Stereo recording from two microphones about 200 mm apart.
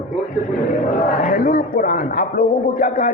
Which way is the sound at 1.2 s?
45° left (ahead or behind).